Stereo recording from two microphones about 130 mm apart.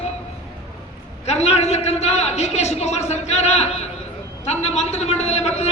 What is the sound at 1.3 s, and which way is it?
A man's voice, 55° left (ahead or behind).